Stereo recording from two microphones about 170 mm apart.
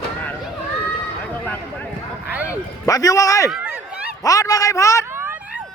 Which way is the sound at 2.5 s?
20° left (ahead or behind).